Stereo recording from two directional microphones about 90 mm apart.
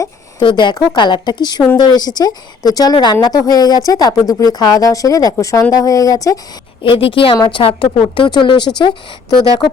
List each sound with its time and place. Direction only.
0.3 s speech: 60° left (ahead or behind); by 6.4 s 40° left (ahead or behind)
6.8 s a woman's voice: 75° left (ahead or behind)
7.9 s speech: 60° left (ahead or behind)